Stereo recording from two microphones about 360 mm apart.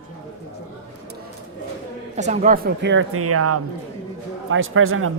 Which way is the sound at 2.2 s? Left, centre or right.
Centre.